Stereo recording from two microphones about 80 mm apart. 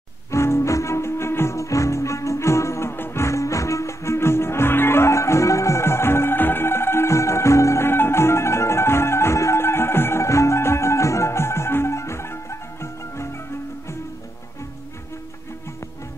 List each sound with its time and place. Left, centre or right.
0.3 s music: left